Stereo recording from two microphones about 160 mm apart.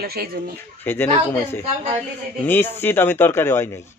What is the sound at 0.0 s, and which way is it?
Speech, 70° right (ahead or behind).